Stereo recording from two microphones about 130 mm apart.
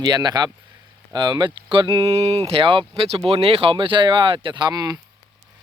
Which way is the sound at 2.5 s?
40° right (ahead or behind).